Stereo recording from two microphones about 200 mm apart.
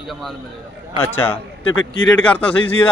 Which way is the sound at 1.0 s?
10° left (ahead or behind).